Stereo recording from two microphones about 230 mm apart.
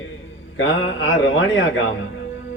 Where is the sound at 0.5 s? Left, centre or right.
Left.